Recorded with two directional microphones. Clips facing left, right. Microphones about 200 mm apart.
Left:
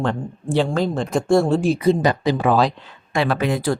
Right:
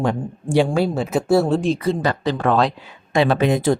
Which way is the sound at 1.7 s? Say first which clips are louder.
Left 3 dB; 15° left (ahead or behind).